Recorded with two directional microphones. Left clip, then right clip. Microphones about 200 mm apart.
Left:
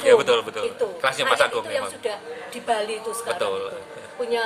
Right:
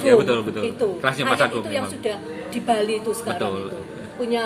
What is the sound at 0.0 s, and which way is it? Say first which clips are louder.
Speech: even; 25° left (ahead or behind).